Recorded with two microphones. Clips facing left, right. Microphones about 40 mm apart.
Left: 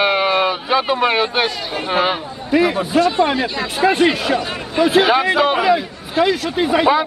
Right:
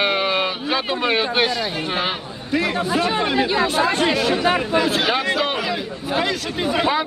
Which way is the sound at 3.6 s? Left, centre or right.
Centre.